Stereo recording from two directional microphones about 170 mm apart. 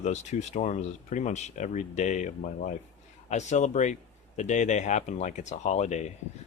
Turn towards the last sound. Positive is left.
turn(degrees=40)  # may be behind; listen again after turning